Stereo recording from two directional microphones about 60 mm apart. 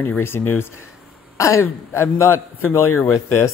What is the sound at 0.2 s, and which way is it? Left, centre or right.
A man's voice, left.